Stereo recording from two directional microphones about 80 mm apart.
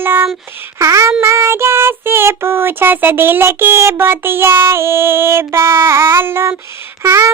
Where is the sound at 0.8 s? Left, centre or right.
Right.